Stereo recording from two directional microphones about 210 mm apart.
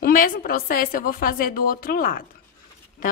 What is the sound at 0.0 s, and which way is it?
A woman's voice, 40° left (ahead or behind).